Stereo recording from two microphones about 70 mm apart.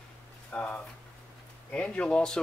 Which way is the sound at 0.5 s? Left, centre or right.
Centre.